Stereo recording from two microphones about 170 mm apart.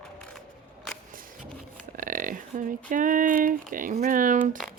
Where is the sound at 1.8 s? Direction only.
55° right (ahead or behind).